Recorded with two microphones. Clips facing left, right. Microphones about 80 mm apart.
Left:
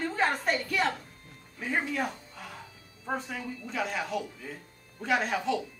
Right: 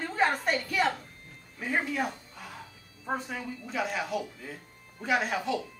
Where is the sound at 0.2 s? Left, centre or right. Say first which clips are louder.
Right 2 dB; centre.